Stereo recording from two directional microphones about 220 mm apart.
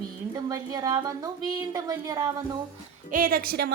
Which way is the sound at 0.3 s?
15° right (ahead or behind).